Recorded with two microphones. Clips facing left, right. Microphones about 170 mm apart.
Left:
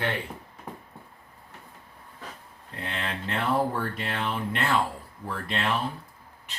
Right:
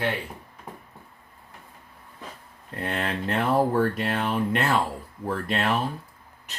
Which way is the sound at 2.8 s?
50° right (ahead or behind).